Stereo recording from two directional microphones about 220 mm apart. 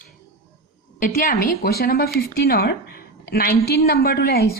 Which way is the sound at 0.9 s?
40° left (ahead or behind).